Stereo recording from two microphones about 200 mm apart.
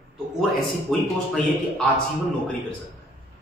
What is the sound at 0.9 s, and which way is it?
Speech, centre (ahead or behind).